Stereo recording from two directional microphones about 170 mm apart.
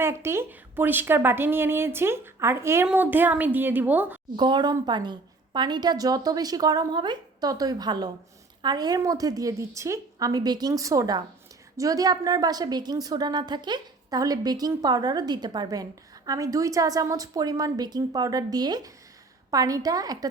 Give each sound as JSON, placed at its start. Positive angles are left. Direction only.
{"t": 0.0, "sound": "speech", "side_deg": -15}
{"t": 4.4, "sound": "a woman's voice", "side_deg": -25}